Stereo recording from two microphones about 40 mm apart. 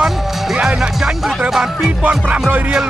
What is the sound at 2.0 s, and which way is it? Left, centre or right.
Music, right.